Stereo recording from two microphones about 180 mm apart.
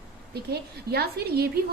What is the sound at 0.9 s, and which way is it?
Speech, 60° right (ahead or behind).